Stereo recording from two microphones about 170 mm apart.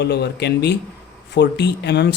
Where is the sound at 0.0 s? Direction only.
75° left (ahead or behind).